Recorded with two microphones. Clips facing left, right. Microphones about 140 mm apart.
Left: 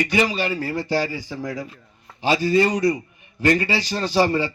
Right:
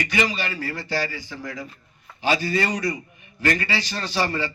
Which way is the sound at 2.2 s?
25° left (ahead or behind).